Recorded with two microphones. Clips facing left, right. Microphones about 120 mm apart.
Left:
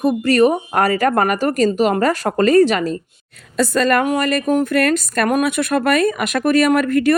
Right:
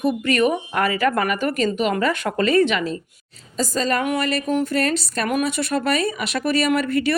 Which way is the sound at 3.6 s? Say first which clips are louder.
Left 6 dB; 60° left (ahead or behind).